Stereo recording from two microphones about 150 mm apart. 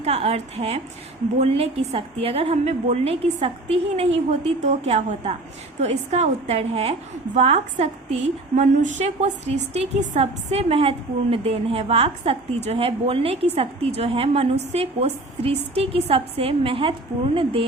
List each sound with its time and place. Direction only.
0.0 s a woman's voice: 45° right (ahead or behind)